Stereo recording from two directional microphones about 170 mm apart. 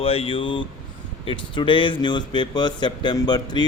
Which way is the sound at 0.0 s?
35° left (ahead or behind).